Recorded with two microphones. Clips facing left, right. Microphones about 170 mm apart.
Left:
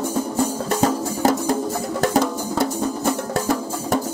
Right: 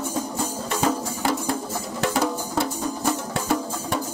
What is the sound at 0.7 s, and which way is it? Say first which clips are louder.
Music: left 4 dB; 40° left (ahead or behind).